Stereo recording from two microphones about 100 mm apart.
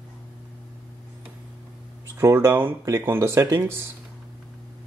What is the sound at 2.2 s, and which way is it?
Speech, 30° right (ahead or behind).